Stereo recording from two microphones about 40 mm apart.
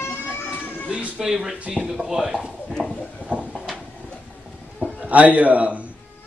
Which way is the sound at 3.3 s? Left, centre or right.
Left.